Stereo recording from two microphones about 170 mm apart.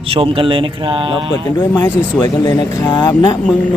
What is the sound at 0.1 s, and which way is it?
Speech, 30° right (ahead or behind).